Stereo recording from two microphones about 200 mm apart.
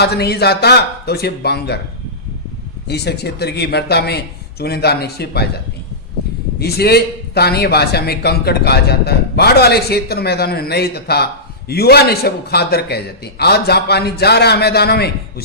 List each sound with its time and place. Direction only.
0.0 s speech: 55° left (ahead or behind)
2.8 s a man's voice: 55° left (ahead or behind)
6.6 s a man's voice: 50° left (ahead or behind)